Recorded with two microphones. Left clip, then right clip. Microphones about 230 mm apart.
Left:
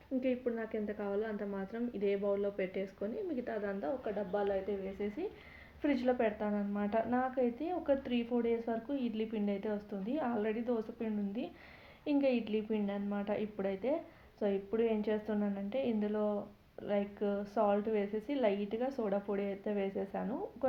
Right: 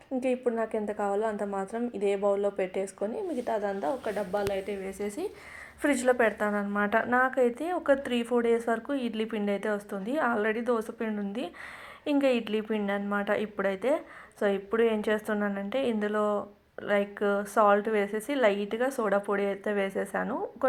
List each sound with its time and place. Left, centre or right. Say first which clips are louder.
0.2 s a woman's voice: right 8 dB; centre
4.9 s a woman's voice: right 6 dB; right